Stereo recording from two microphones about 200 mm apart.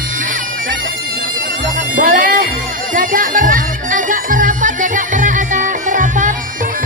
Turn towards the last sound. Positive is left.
turn(degrees=-40)  # may be behind; listen again after turning